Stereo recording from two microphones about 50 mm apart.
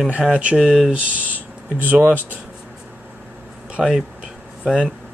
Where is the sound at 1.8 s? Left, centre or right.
Right.